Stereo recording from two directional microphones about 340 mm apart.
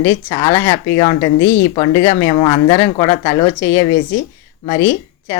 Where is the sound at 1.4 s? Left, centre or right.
Left.